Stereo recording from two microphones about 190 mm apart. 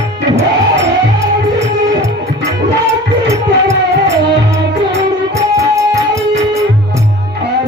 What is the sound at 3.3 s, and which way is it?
Music, 15° right (ahead or behind).